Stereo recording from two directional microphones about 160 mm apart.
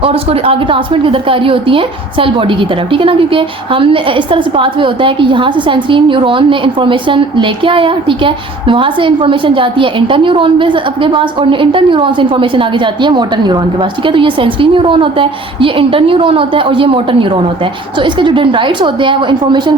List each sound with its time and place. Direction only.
0.0 s a woman's voice: 35° right (ahead or behind)